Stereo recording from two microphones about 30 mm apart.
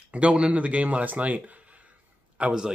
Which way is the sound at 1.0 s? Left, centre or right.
Right.